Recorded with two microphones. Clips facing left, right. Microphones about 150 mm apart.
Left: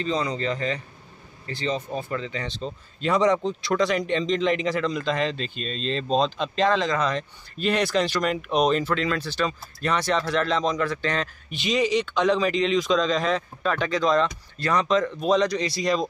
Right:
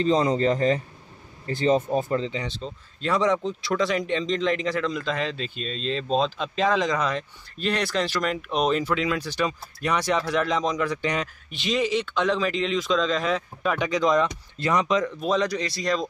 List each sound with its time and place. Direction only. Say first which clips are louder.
0.0 s a man's voice: right 5 dB; 45° right (ahead or behind)
2.6 s speech: left 2 dB; centre (ahead or behind)
7.5 s speech: left 3 dB; 5° left (ahead or behind); by 11.2 s 15° right (ahead or behind)
11.5 s speech: left 2 dB; centre (ahead or behind)
15.1 s speech: left 3 dB; centre (ahead or behind)
15.7 s speech: left 2 dB; 10° left (ahead or behind)